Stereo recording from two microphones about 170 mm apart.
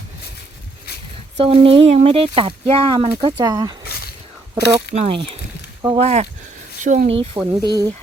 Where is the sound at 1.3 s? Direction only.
35° right (ahead or behind).